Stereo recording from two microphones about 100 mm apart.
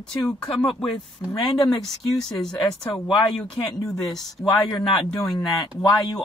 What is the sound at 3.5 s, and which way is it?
Speech, 35° left (ahead or behind).